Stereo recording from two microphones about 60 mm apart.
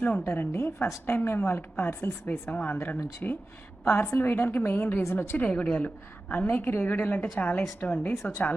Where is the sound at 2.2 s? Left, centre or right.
Left.